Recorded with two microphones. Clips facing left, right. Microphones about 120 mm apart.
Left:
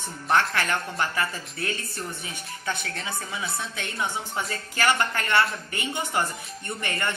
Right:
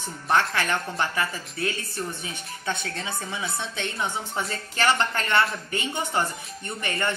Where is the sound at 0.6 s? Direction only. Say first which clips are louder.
Right 1 dB; 20° right (ahead or behind).